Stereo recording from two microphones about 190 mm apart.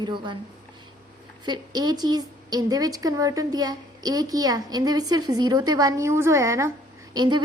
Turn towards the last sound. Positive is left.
turn(degrees=-25)  # may be behind; listen again after turning